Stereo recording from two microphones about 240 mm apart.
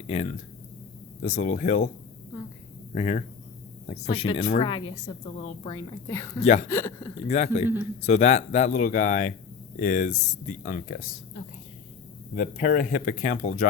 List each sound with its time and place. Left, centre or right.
0.1 s speech: left
2.9 s a woman's voice: left; by 6.4 s centre
6.4 s speech: left
6.7 s a woman's voice: centre
7.3 s speech: left
12.4 s speech: left